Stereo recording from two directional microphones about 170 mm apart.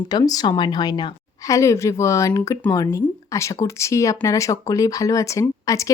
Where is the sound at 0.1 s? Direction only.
20° left (ahead or behind).